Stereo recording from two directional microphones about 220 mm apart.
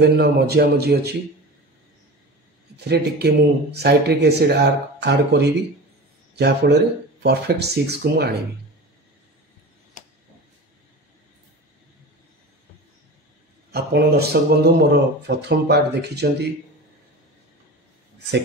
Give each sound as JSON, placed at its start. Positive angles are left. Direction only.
{"t": 0.0, "sound": "a man's voice", "side_deg": -50}
{"t": 2.9, "sound": "a man's voice", "side_deg": -45}
{"t": 13.7, "sound": "a man's voice", "side_deg": -45}